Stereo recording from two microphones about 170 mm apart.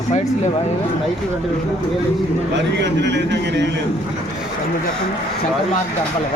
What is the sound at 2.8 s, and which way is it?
Speech, 90° right.